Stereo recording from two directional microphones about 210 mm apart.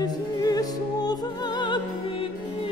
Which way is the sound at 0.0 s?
15° left (ahead or behind).